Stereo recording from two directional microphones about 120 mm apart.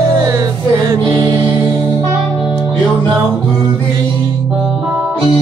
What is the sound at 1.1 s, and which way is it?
Mantra, 40° right (ahead or behind).